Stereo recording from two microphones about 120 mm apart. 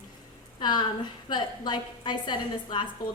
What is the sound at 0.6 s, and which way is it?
A woman's voice, 40° left (ahead or behind).